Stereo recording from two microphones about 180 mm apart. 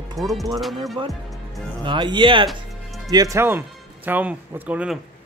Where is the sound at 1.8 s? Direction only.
25° right (ahead or behind).